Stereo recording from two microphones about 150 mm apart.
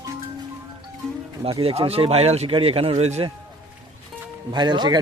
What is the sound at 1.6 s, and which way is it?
A man's voice, 40° right (ahead or behind).